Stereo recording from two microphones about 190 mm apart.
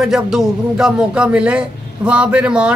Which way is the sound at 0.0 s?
Centre (ahead or behind).